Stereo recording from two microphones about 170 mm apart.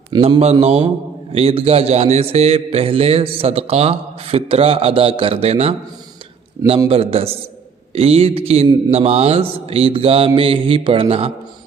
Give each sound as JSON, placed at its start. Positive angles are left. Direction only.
{"t": 0.1, "sound": "a man's voice", "side_deg": -35}